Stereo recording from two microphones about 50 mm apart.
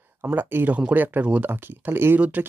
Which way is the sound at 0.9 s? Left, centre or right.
Right.